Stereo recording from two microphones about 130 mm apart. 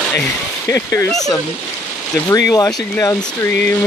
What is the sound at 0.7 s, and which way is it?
Speech, 15° left (ahead or behind).